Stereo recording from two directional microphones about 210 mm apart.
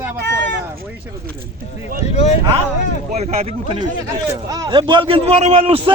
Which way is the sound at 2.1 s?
30° left (ahead or behind).